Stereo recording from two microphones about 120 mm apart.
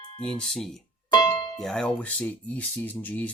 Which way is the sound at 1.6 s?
5° left (ahead or behind).